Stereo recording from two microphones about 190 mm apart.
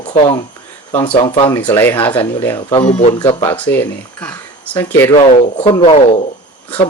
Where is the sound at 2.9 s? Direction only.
35° left (ahead or behind).